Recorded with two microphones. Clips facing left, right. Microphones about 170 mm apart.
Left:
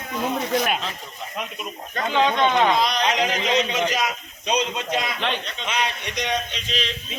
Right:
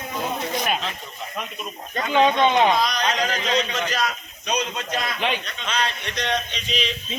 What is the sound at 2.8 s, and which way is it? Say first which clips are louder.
A man's voice: left 1 dB; 25° left (ahead or behind).